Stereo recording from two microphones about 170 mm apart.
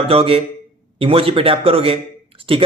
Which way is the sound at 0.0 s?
35° right (ahead or behind).